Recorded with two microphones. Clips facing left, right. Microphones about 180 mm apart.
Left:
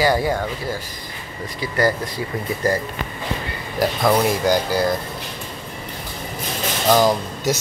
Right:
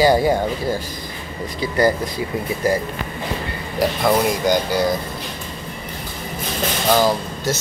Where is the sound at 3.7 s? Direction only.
Centre (ahead or behind).